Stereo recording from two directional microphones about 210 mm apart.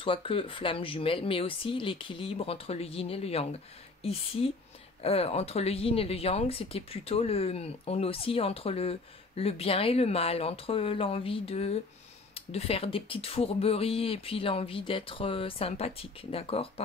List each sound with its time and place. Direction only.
0.0 s speech: 25° left (ahead or behind)